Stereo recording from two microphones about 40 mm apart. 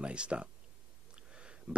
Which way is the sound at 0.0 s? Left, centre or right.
Right.